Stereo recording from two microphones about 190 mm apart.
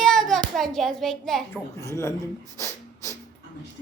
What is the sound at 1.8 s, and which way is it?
Speech, 15° left (ahead or behind).